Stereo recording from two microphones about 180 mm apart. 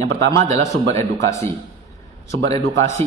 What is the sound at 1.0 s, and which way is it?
Speech, 15° left (ahead or behind).